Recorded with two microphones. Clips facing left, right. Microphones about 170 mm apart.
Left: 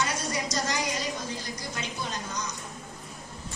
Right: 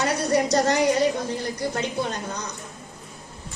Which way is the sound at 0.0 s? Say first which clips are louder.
Right 9 dB; 65° right (ahead or behind).